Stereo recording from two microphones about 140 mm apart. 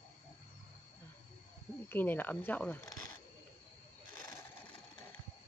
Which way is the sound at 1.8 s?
15° left (ahead or behind).